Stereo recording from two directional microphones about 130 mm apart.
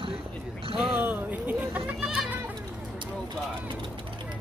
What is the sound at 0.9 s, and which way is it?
Children playing, 15° right (ahead or behind).